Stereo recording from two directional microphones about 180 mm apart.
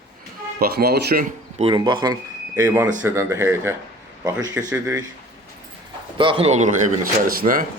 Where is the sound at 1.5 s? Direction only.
30° right (ahead or behind).